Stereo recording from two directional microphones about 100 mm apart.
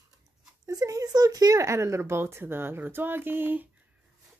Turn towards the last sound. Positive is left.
turn(degrees=-20)  # may be behind; listen again after turning